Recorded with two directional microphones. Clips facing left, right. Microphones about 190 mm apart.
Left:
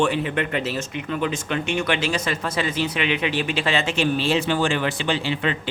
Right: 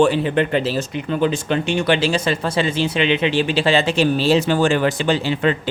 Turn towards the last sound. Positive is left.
turn(degrees=-45)  # may be behind; listen again after turning